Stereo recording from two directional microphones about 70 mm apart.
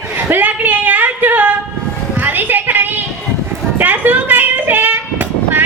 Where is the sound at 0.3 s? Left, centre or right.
Right.